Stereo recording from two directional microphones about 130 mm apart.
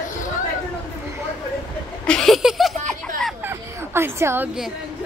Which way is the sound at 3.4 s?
15° right (ahead or behind).